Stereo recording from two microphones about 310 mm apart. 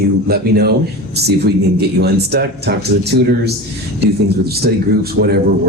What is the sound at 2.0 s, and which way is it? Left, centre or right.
Speech, right.